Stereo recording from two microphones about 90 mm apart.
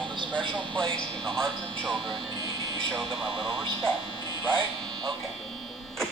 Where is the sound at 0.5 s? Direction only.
5° left (ahead or behind).